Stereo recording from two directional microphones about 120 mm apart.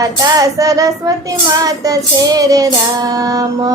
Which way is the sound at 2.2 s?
30° right (ahead or behind).